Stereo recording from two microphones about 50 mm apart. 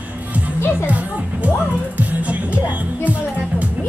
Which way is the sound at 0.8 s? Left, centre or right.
Right.